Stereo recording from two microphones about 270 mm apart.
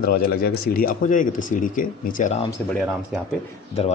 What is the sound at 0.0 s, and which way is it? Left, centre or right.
Speech, left.